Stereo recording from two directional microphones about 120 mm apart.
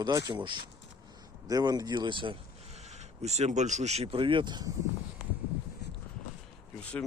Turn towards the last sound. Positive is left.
turn(degrees=10)  # may be behind; listen again after turning